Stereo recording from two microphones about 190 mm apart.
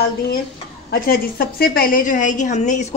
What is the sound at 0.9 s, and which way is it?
A woman's voice, 50° left (ahead or behind).